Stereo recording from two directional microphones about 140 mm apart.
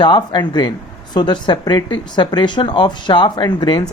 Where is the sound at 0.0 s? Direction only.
35° left (ahead or behind).